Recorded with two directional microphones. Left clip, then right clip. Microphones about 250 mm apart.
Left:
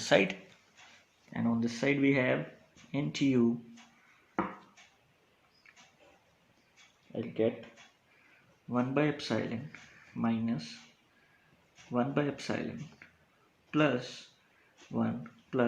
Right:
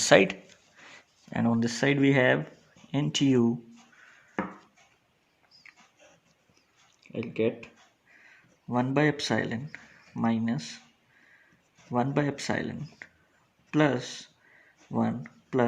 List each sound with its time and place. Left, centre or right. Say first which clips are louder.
0.0 s speech: right 7 dB; right
7.1 s speech: right 3 dB; right
8.7 s speech: right 5 dB; right
11.9 s speech: right 4 dB; right
13.7 s speech: right 4 dB; right